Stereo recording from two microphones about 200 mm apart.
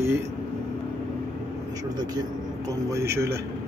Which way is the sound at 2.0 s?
20° right (ahead or behind).